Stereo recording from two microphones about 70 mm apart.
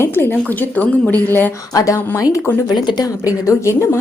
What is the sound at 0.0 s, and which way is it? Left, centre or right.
Speech, left.